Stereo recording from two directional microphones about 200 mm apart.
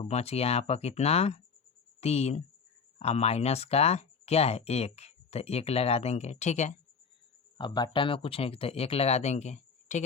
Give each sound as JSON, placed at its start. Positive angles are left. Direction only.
{"t": 0.0, "sound": "speech", "side_deg": 30}
{"t": 7.6, "sound": "speech", "side_deg": 20}